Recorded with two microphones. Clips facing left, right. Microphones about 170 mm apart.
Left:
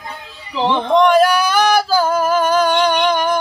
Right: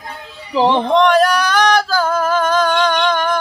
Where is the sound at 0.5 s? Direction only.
35° right (ahead or behind).